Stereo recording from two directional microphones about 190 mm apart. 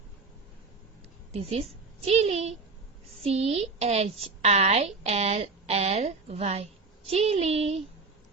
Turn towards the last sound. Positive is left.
turn(degrees=-35)  # may be behind; listen again after turning